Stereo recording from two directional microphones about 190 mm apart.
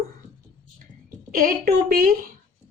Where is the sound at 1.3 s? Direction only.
50° right (ahead or behind).